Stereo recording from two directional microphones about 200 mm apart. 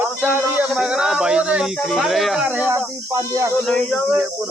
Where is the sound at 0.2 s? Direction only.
10° right (ahead or behind).